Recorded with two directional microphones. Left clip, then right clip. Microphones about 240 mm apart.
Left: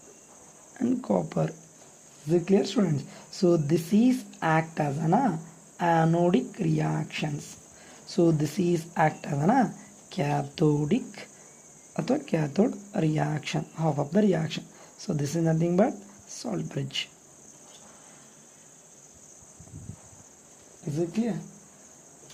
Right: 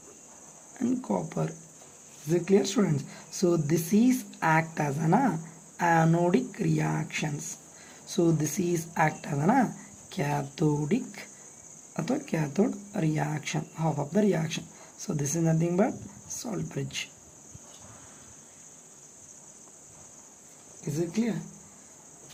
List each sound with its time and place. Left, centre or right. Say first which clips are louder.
0.8 s speech: left 3 dB; centre
20.9 s speech: left 1 dB; centre